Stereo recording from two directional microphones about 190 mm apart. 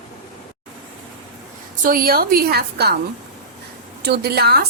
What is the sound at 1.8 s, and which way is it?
A woman's voice, 50° right (ahead or behind).